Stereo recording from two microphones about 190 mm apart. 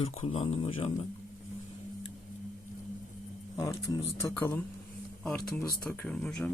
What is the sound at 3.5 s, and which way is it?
Speech, 20° left (ahead or behind).